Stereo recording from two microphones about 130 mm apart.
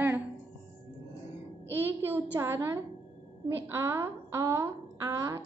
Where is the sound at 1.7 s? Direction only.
15° right (ahead or behind).